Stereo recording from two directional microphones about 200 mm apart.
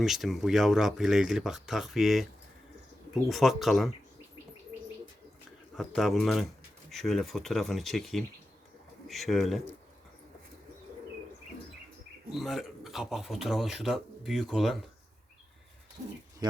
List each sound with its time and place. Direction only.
0.0 s speech: centre (ahead or behind)
3.2 s speech: centre (ahead or behind)
5.7 s speech: centre (ahead or behind)
12.3 s speech: centre (ahead or behind)
16.4 s speech: 20° right (ahead or behind)